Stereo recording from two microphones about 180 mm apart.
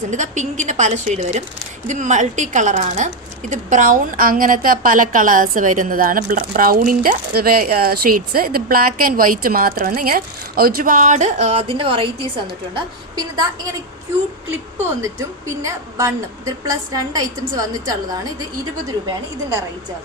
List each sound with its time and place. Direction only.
0.1 s a woman's voice: 40° right (ahead or behind); by 13.5 s 25° right (ahead or behind)
15.4 s a woman's voice: 15° right (ahead or behind)